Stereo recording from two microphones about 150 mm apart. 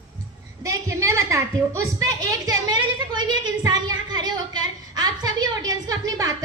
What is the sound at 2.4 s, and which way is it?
A woman's voice, 30° right (ahead or behind).